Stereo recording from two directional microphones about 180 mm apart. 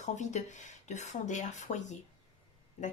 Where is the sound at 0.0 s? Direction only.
40° left (ahead or behind).